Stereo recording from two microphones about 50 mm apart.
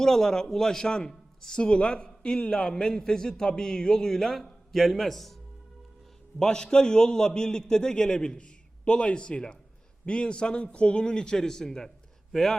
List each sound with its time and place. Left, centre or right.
0.0 s a man's voice: centre
6.4 s a man's voice: centre